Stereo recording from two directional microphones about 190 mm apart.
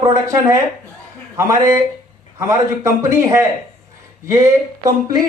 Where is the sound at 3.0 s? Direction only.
15° right (ahead or behind).